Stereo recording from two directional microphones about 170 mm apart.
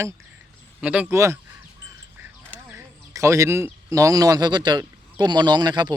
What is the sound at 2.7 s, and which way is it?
Speech, 15° right (ahead or behind).